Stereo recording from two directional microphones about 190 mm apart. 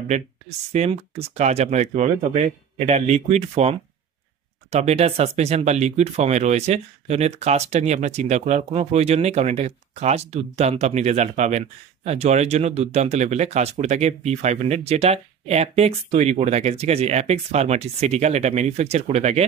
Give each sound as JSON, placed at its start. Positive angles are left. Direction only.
{"t": 0.1, "sound": "speech", "side_deg": -35}